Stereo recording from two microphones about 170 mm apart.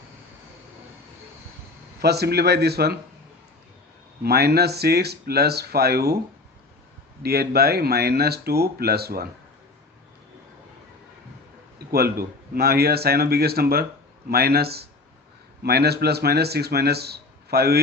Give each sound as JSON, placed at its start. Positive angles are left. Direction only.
{"t": 2.0, "sound": "speech", "side_deg": -75}
{"t": 4.2, "sound": "speech", "side_deg": -70}
{"t": 7.2, "sound": "speech", "side_deg": -65}
{"t": 11.9, "sound": "speech", "side_deg": -65}